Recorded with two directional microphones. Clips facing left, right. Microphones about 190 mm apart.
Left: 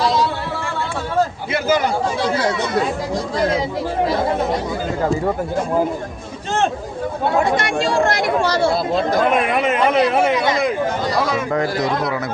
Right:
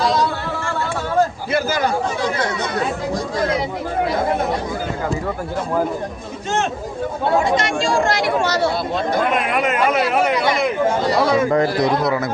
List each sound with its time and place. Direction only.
7.5 s speech: 55° left (ahead or behind)
9.9 s speech: 25° left (ahead or behind)
10.8 s speech: 30° right (ahead or behind)